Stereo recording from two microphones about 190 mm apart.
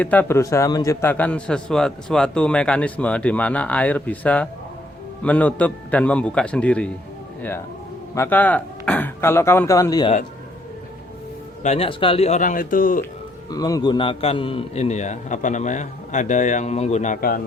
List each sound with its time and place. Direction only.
0.0 s a man's voice: 10° left (ahead or behind)
8.1 s a man's voice: 10° left (ahead or behind)
11.6 s a man's voice: 35° left (ahead or behind)
13.5 s a man's voice: 20° left (ahead or behind); by 17.4 s 50° left (ahead or behind)